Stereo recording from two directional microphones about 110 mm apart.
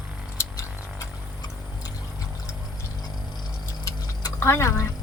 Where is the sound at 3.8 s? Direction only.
35° left (ahead or behind).